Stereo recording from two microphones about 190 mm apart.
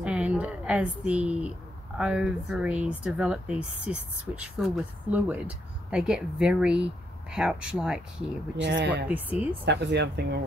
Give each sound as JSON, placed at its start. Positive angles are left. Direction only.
{"t": 0.0, "sound": "a sound", "side_deg": -5}
{"t": 2.0, "sound": "speech", "side_deg": -5}
{"t": 8.5, "sound": "speech", "side_deg": -65}
{"t": 9.0, "sound": "speech", "side_deg": -10}
{"t": 9.7, "sound": "speech", "side_deg": -65}